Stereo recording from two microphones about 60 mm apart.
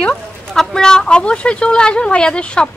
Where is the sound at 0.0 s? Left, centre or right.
Centre.